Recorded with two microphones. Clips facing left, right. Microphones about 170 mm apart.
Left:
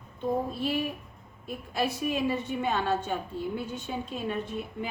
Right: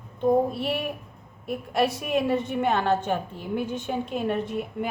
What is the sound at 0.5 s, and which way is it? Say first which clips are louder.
A woman's voice: right 2 dB; 70° right (ahead or behind).